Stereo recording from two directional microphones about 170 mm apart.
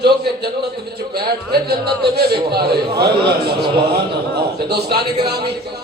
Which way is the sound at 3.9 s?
70° right (ahead or behind).